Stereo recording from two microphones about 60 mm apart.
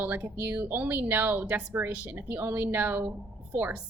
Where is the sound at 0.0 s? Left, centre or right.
Right.